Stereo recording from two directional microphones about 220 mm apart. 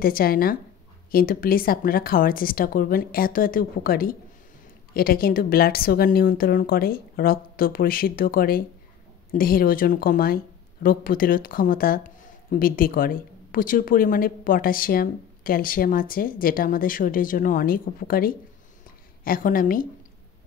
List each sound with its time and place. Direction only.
0.0 s a woman's voice: 40° left (ahead or behind)